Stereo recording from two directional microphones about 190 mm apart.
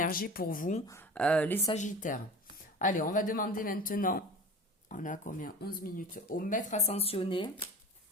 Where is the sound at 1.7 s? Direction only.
40° left (ahead or behind); by 7.6 s 25° left (ahead or behind).